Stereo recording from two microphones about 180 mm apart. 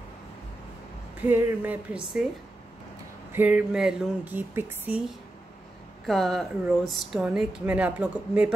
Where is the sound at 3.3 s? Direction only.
10° right (ahead or behind).